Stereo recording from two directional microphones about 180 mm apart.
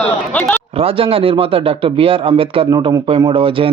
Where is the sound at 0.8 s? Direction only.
30° right (ahead or behind).